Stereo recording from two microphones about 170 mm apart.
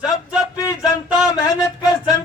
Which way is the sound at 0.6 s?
20° left (ahead or behind).